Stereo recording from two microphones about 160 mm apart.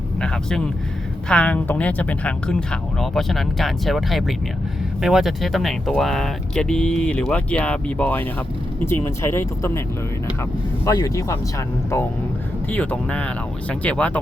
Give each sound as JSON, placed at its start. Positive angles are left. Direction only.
{"t": 0.2, "sound": "a sound", "side_deg": 5}
{"t": 1.3, "sound": "speech", "side_deg": 10}
{"t": 10.8, "sound": "speech", "side_deg": 20}
{"t": 12.7, "sound": "speech", "side_deg": 10}